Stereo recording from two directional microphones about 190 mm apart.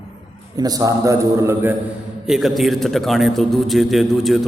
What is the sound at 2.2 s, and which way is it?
A man's voice, centre (ahead or behind).